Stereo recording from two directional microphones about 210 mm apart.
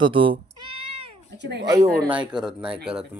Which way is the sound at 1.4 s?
55° right (ahead or behind).